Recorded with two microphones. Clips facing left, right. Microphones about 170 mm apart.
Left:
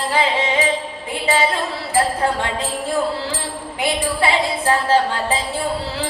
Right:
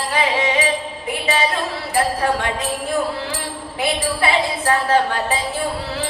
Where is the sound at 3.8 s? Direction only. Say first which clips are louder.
Even; 20° left (ahead or behind).